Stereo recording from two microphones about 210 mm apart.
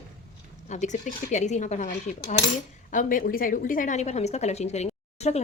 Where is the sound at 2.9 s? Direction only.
40° left (ahead or behind).